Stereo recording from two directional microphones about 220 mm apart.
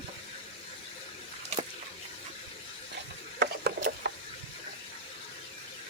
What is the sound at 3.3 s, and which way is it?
Mechanisms, 45° right (ahead or behind).